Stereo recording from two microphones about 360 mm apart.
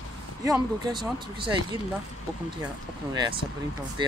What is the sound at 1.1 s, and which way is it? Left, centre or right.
Speech, centre.